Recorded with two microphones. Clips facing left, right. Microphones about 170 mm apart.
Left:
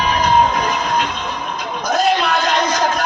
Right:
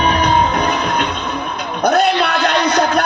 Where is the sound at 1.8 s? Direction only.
65° right (ahead or behind).